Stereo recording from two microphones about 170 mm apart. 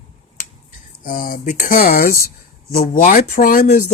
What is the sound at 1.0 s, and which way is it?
Speech, 55° left (ahead or behind).